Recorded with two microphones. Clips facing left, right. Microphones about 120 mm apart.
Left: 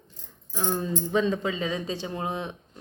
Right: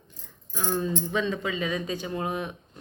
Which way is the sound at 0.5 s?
25° left (ahead or behind).